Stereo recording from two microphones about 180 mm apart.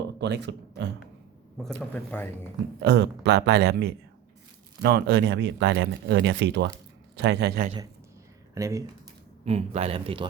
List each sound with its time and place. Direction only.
0.2 s speech: 70° right (ahead or behind)
2.0 s speech: 10° left (ahead or behind)
2.8 s speech: 70° right (ahead or behind)
8.5 s speech: 15° right (ahead or behind)
9.4 s speech: 35° right (ahead or behind)